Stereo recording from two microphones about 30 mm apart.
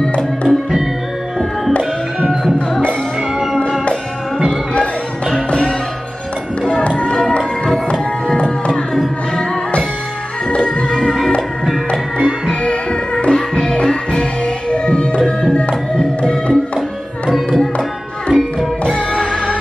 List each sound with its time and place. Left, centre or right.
0.5 s music: centre
6.7 s music: left
8.4 s music: left
10.5 s music: left
12.6 s music: left
13.3 s music: left
14.4 s music: left
16.2 s music: left
17.3 s music: centre
18.3 s music: centre
18.9 s music: left